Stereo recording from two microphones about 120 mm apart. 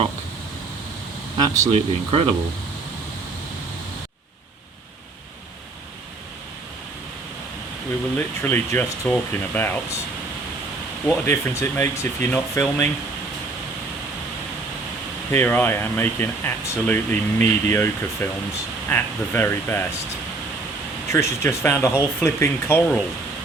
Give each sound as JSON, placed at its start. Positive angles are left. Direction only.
{"t": 1.4, "sound": "speech", "side_deg": -30}
{"t": 1.7, "sound": "speech", "side_deg": -50}
{"t": 8.4, "sound": "speech", "side_deg": 20}
{"t": 11.0, "sound": "speech", "side_deg": 15}
{"t": 15.3, "sound": "speech", "side_deg": 15}
{"t": 21.1, "sound": "speech", "side_deg": 25}